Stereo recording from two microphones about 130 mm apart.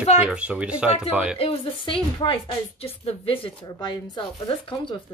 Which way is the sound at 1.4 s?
45° left (ahead or behind).